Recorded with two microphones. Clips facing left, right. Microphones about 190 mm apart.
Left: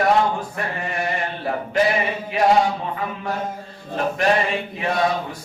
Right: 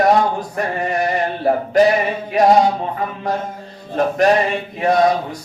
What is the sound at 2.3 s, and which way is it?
Music, 40° right (ahead or behind).